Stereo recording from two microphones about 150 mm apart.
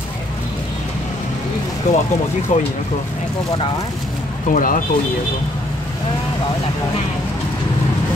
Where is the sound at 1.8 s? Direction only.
55° left (ahead or behind).